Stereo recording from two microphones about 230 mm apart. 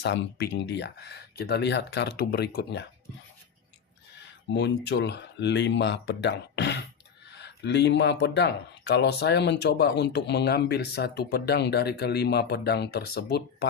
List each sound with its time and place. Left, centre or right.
0.0 s speech: left
4.5 s speech: left